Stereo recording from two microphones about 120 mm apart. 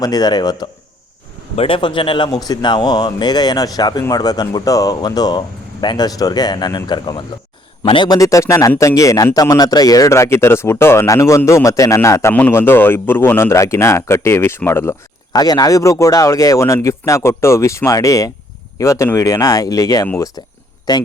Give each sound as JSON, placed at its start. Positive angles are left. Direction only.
{"t": 0.0, "sound": "speech", "side_deg": 35}
{"t": 1.5, "sound": "speech", "side_deg": 45}
{"t": 15.3, "sound": "speech", "side_deg": 35}